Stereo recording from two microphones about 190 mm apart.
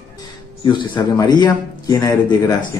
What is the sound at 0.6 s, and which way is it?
A man's voice, 20° left (ahead or behind).